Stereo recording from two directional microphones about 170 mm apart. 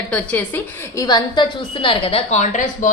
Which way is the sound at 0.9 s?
20° left (ahead or behind).